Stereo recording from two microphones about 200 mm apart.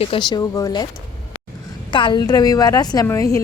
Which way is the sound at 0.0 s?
25° left (ahead or behind).